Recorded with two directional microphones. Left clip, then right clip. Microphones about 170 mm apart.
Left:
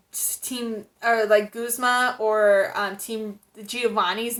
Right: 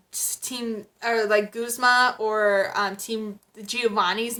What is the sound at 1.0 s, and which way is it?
Speech, 10° right (ahead or behind).